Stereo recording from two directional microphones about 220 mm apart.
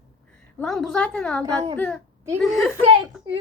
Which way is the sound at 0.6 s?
Centre (ahead or behind).